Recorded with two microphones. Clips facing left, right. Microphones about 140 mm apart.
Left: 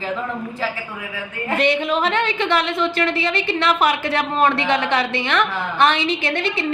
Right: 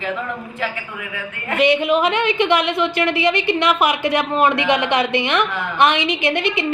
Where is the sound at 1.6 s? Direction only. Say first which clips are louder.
Right 4 dB; 10° right (ahead or behind).